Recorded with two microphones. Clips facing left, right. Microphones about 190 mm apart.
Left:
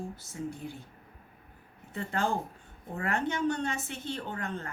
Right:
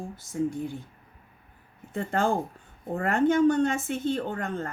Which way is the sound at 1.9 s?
50° right (ahead or behind).